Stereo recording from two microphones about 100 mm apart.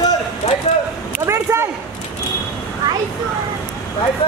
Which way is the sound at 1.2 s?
25° right (ahead or behind).